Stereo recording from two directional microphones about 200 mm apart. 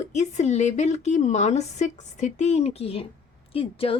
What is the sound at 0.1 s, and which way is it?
Speech, 35° left (ahead or behind).